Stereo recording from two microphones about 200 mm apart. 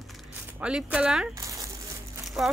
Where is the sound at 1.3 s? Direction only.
15° right (ahead or behind).